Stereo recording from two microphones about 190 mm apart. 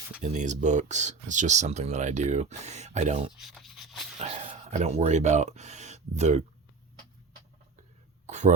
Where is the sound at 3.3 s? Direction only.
Centre (ahead or behind).